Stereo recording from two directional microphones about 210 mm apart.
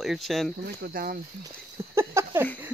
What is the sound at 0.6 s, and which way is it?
Speech, 45° right (ahead or behind).